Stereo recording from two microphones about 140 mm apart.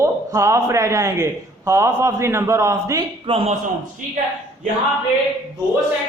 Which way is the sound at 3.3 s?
40° right (ahead or behind).